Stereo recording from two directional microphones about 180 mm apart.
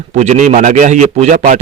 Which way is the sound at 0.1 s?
40° right (ahead or behind).